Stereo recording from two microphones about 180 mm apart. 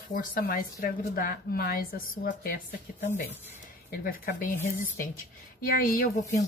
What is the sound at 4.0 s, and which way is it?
Speech, 55° left (ahead or behind).